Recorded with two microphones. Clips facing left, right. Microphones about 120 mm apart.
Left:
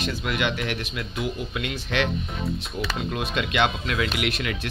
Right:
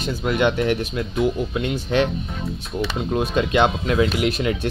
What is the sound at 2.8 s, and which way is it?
Speech, 30° right (ahead or behind).